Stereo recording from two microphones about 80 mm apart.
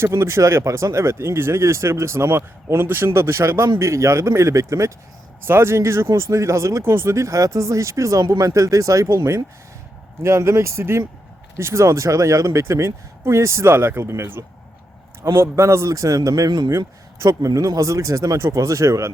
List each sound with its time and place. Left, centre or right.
0.0 s speech: right
16.6 s speech: right